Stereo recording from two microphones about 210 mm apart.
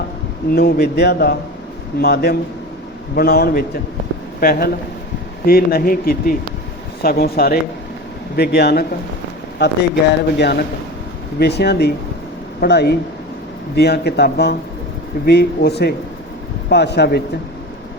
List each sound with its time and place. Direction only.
0.5 s a man's voice: 50° left (ahead or behind)